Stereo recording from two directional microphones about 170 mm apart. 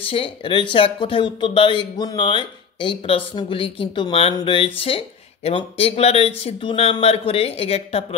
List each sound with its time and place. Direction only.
0.1 s speech: 30° left (ahead or behind)